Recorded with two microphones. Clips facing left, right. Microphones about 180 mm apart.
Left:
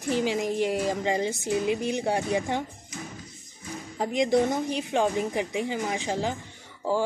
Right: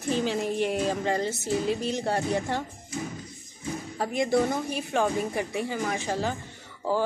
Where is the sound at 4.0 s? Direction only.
20° left (ahead or behind).